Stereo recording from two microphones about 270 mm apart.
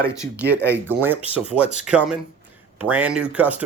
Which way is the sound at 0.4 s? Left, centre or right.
Centre.